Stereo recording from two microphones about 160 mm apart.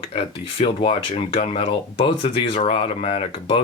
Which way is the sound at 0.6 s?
35° left (ahead or behind).